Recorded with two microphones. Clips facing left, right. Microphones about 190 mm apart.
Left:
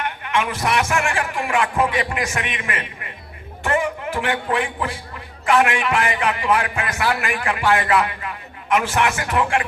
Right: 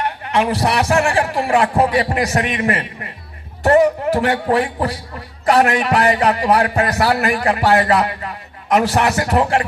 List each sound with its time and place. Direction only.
0.0 s a man's voice: 35° right (ahead or behind)